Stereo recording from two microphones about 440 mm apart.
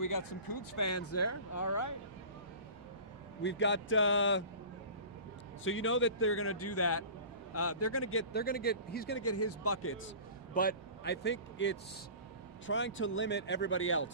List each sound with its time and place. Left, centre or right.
0.0 s speech: left
3.4 s speech: left
5.6 s speech: left
10.5 s speech: centre